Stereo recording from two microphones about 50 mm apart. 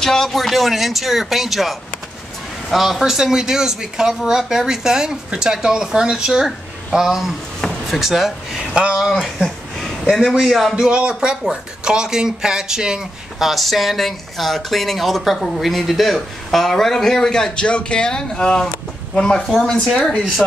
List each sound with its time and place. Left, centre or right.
0.0 s speech: centre
9.1 s a sound: centre
10.3 s speech: centre
10.8 s speech: centre
13.5 s speech: centre